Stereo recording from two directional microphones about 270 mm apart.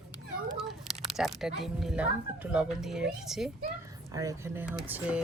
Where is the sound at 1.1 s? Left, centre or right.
Centre.